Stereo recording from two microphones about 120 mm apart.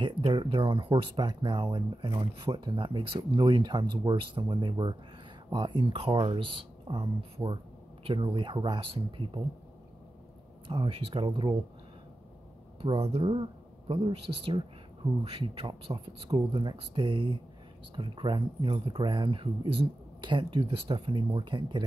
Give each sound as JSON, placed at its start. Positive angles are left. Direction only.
{"t": 0.0, "sound": "speech", "side_deg": -40}
{"t": 7.4, "sound": "speech", "side_deg": -20}
{"t": 8.0, "sound": "speech", "side_deg": -45}
{"t": 10.7, "sound": "speech", "side_deg": -50}
{"t": 12.8, "sound": "speech", "side_deg": -55}